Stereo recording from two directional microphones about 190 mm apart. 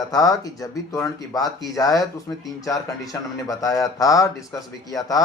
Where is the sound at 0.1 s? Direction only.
20° left (ahead or behind).